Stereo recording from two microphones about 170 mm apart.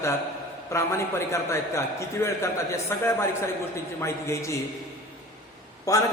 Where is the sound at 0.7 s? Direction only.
15° left (ahead or behind).